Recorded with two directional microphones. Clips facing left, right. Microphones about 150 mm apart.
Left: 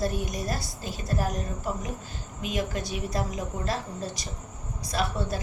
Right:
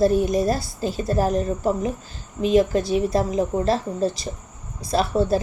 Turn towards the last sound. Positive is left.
turn(degrees=-30)  # may be behind; listen again after turning